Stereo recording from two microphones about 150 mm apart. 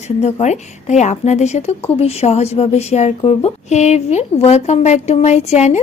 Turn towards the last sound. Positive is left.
turn(degrees=50)  # may be behind; listen again after turning